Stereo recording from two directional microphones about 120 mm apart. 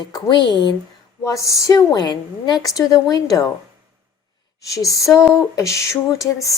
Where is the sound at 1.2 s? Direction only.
25° left (ahead or behind).